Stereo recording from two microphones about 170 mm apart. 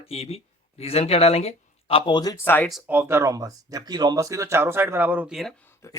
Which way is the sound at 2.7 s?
5° right (ahead or behind).